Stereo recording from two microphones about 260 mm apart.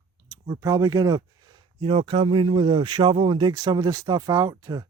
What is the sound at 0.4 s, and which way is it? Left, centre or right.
Speech, centre.